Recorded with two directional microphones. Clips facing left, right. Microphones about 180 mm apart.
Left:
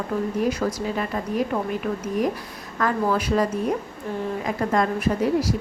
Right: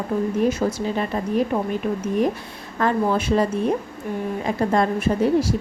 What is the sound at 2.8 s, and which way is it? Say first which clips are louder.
A woman's voice: right 2 dB; 25° right (ahead or behind).